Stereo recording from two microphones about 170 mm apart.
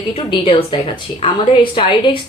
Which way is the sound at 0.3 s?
30° left (ahead or behind).